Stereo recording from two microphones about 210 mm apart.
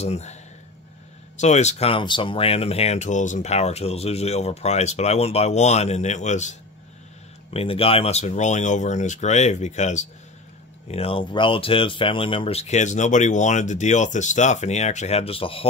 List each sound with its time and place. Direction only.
0.0 s speech: 30° left (ahead or behind)
7.5 s speech: 25° left (ahead or behind)